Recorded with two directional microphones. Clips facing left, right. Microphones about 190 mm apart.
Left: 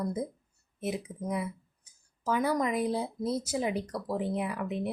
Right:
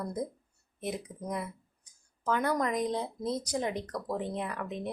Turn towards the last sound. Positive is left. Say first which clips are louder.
# left 3 dB
turn(degrees=10)  # may be behind; listen again after turning